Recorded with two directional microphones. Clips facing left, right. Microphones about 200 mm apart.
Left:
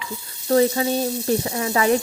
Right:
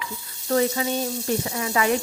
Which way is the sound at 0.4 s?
35° left (ahead or behind).